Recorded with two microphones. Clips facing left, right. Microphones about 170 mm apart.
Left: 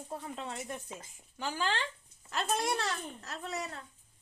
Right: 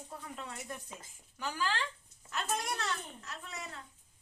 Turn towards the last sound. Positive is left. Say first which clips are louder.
# left 6 dB
turn(degrees=40)  # may be behind; listen again after turning